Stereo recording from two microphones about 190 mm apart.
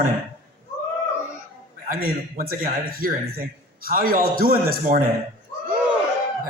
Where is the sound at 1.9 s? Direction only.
50° right (ahead or behind).